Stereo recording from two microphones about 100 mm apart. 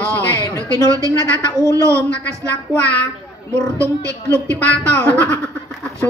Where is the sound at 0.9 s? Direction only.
30° right (ahead or behind).